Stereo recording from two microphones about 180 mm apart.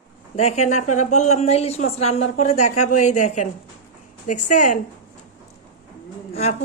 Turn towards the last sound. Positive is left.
turn(degrees=35)  # may be behind; listen again after turning